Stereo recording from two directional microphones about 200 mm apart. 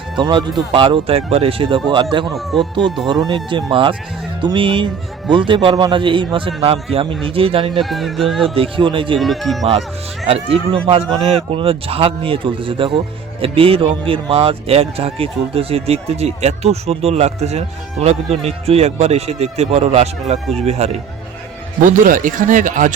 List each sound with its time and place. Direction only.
0.2 s speech: 20° right (ahead or behind)
7.7 s speech: centre (ahead or behind)
8.4 s speech: 25° right (ahead or behind)
9.1 s speech: centre (ahead or behind)
10.2 s speech: 30° right (ahead or behind)